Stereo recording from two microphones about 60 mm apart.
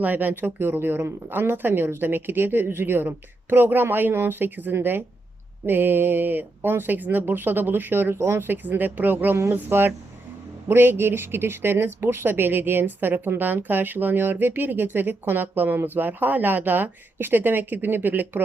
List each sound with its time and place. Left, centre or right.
0.0 s speech: right